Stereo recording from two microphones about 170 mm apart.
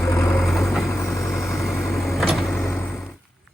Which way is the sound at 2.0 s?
Centre (ahead or behind).